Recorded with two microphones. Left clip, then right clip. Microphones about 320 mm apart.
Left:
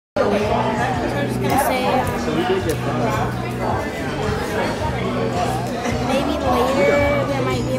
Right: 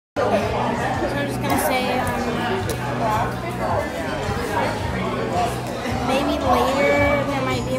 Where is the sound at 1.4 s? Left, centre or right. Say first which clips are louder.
Left 3 dB; centre.